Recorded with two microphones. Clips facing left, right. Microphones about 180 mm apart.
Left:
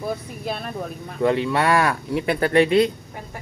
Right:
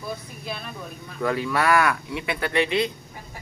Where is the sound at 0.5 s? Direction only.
50° left (ahead or behind).